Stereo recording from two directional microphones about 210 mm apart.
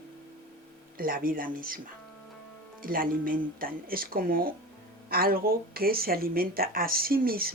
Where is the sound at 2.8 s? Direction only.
40° right (ahead or behind).